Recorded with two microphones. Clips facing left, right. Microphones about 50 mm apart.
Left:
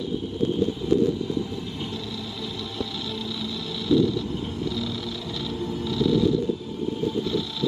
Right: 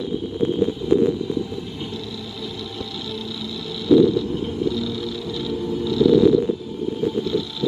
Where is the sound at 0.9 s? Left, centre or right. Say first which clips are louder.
Right 4 dB; right.